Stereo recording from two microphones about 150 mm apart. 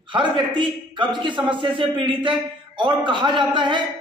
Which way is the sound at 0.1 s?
35° right (ahead or behind).